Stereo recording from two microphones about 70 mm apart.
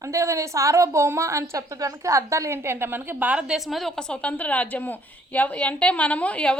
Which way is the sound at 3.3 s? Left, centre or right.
Centre.